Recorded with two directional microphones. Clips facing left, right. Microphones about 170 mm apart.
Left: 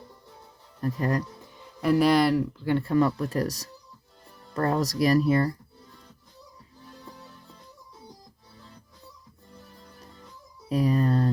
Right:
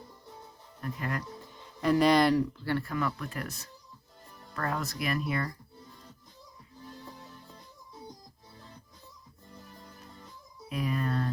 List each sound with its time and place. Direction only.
0.8 s speech: 35° left (ahead or behind)
1.8 s speech: 5° left (ahead or behind)
2.8 s speech: 30° left (ahead or behind)
10.7 s a sound: 35° left (ahead or behind)